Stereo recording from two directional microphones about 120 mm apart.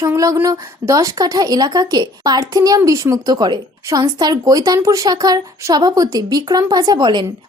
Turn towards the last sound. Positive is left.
turn(degrees=-35)  # may be behind; listen again after turning